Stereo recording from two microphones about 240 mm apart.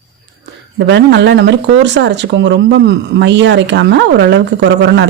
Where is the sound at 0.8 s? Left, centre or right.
Right.